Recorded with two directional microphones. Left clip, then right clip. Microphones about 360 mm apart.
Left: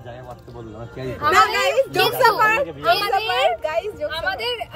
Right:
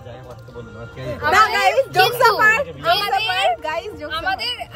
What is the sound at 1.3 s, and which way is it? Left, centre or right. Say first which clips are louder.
A woman's voice: right 2 dB; centre.